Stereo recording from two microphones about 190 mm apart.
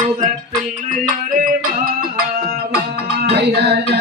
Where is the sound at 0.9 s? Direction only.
45° right (ahead or behind).